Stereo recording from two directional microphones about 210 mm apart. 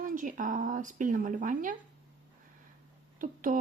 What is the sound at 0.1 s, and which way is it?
Speech, 40° right (ahead or behind).